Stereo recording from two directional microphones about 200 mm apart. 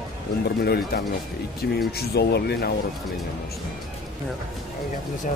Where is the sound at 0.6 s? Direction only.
50° left (ahead or behind).